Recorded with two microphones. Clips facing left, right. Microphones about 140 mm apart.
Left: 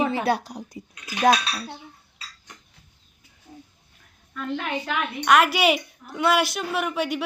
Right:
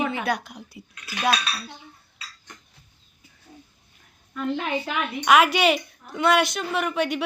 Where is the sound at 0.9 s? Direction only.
20° left (ahead or behind).